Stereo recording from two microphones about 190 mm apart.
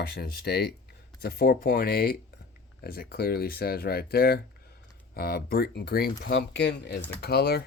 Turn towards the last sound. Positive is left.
turn(degrees=55)  # may be behind; listen again after turning